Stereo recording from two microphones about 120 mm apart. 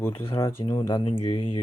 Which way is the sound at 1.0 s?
50° left (ahead or behind).